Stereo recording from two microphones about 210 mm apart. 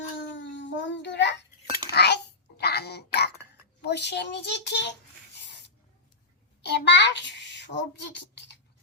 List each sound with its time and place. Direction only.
0.3 s child singing: 60° left (ahead or behind)
1.9 s babbling: 50° left (ahead or behind)
3.8 s a child's voice: 55° left (ahead or behind)
5.5 s spray: 55° left (ahead or behind)
6.6 s a child's voice: 55° left (ahead or behind)